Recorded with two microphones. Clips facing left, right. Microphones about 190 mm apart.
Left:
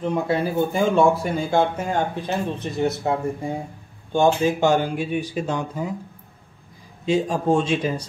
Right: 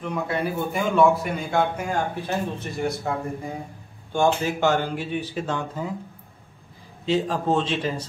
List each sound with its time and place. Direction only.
0.0 s speech: 30° left (ahead or behind); by 5.9 s 15° left (ahead or behind)
7.1 s speech: 10° left (ahead or behind)